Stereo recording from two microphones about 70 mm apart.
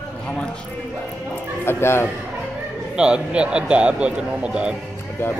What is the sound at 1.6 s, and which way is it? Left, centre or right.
Speech, left.